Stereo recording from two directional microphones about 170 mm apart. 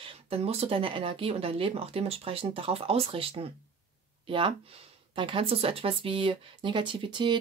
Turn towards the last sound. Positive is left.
turn(degrees=-30)  # may be behind; listen again after turning